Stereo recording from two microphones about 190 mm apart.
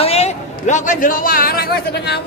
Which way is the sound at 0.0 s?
35° left (ahead or behind).